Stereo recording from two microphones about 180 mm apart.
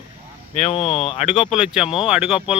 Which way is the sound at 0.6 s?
35° left (ahead or behind).